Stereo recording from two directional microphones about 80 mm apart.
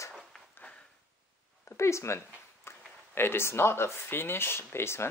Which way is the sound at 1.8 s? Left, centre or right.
Left.